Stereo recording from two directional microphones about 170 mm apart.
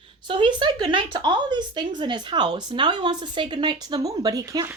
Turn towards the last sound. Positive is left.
turn(degrees=-20)  # may be behind; listen again after turning